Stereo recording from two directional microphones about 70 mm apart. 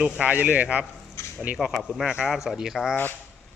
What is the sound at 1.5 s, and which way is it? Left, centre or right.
Speech, centre.